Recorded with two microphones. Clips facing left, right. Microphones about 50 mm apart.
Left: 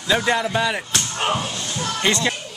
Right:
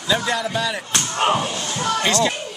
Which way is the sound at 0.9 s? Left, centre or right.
Centre.